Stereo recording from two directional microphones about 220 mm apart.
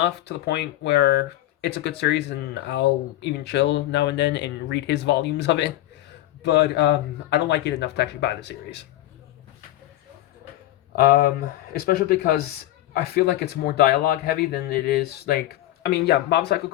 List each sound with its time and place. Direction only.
0.0 s speech: 50° left (ahead or behind)
10.9 s speech: 40° left (ahead or behind)